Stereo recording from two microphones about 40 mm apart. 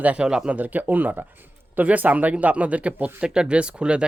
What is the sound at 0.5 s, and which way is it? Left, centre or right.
Speech, right.